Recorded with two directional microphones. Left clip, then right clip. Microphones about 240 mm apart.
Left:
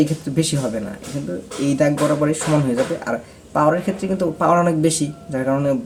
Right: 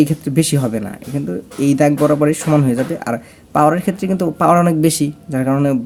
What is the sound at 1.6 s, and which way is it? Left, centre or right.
Speech, right.